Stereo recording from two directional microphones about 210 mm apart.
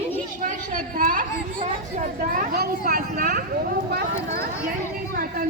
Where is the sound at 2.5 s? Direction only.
45° right (ahead or behind).